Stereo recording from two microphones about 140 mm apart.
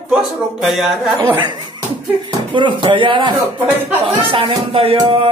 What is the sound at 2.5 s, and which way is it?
Speech, 35° right (ahead or behind).